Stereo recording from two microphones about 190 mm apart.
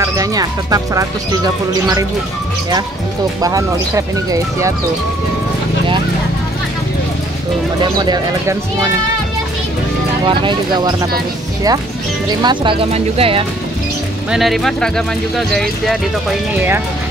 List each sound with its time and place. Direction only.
0.0 s speech: 20° right (ahead or behind)
3.4 s speech: 20° right (ahead or behind)
8.0 s speech: 20° right (ahead or behind)
10.2 s speech: 25° right (ahead or behind)
12.4 s speech: 25° right (ahead or behind)
14.3 s speech: centre (ahead or behind)